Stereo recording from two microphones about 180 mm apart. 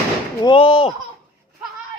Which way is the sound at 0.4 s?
30° left (ahead or behind).